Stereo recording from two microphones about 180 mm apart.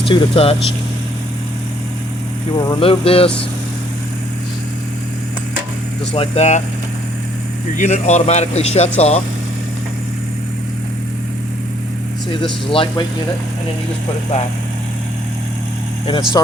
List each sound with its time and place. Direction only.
0.0 s a man's voice: 30° left (ahead or behind)
2.6 s a man's voice: 25° left (ahead or behind)
6.1 s a man's voice: 35° left (ahead or behind)
7.8 s a man's voice: 40° left (ahead or behind)
12.3 s speech: 30° left (ahead or behind)
16.0 s speech: 25° left (ahead or behind)